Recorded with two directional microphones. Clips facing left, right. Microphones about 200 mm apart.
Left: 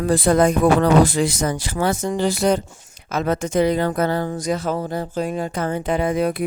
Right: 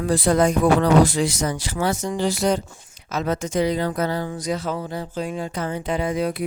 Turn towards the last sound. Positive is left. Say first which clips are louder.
# left 3 dB
turn(degrees=55)  # may be behind; listen again after turning